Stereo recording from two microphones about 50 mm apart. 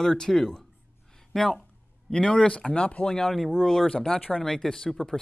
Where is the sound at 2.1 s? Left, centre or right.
Centre.